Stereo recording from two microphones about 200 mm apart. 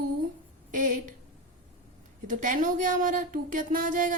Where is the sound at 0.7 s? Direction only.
40° right (ahead or behind).